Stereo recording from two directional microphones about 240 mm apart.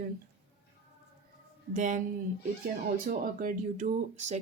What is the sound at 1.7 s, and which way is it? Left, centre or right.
Speech, right.